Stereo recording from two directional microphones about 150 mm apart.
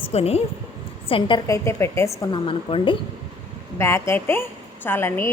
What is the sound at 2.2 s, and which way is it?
Speech, 35° left (ahead or behind).